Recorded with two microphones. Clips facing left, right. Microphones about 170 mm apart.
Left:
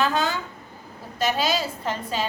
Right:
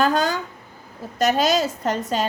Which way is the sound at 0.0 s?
45° right (ahead or behind).